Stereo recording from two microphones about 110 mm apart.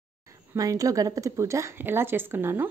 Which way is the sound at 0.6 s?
30° right (ahead or behind).